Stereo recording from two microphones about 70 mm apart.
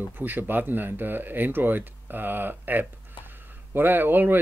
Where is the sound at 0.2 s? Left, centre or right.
Right.